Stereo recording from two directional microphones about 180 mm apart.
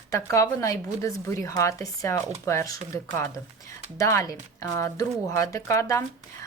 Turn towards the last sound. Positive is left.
turn(degrees=15)  # may be behind; listen again after turning